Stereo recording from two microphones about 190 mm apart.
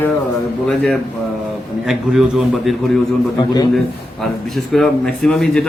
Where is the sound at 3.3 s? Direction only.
20° left (ahead or behind).